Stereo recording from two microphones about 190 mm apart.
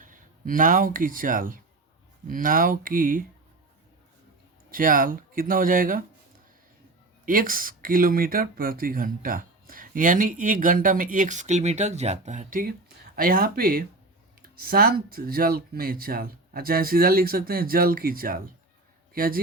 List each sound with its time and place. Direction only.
0.0 s speech: 45° right (ahead or behind)
4.7 s speech: 45° right (ahead or behind)
7.3 s a man's voice: 45° right (ahead or behind)